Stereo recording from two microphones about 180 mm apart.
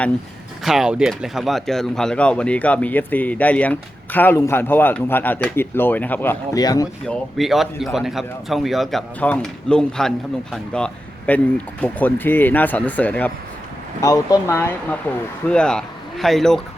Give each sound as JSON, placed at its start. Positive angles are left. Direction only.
{"t": 0.6, "sound": "speech", "side_deg": 0}
{"t": 6.6, "sound": "speech", "side_deg": 20}
{"t": 7.1, "sound": "speech", "side_deg": 0}
{"t": 14.0, "sound": "speech", "side_deg": 20}
{"t": 15.4, "sound": "speech", "side_deg": 5}